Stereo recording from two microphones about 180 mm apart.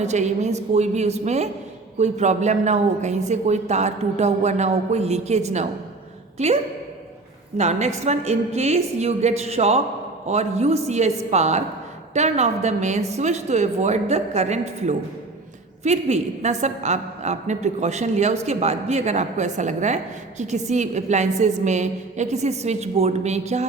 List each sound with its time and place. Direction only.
0.0 s a woman's voice: 40° right (ahead or behind)
7.5 s a woman's voice: 40° right (ahead or behind)